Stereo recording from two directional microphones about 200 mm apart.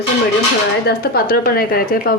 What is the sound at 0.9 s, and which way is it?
A woman's voice, 50° left (ahead or behind).